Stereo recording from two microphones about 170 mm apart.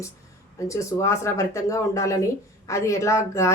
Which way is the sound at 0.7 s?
15° left (ahead or behind).